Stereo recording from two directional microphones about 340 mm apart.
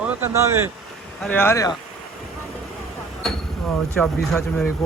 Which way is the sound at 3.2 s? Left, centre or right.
Centre.